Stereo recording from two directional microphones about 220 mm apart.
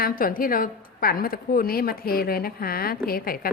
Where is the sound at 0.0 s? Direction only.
40° left (ahead or behind).